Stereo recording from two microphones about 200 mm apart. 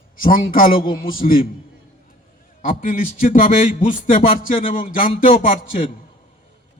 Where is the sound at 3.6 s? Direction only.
40° left (ahead or behind).